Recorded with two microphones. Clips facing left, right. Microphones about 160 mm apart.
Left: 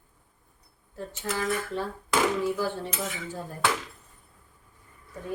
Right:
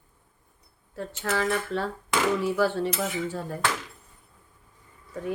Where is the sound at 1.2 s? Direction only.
90° right.